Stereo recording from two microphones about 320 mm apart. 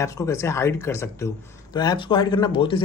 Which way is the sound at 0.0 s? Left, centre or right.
Centre.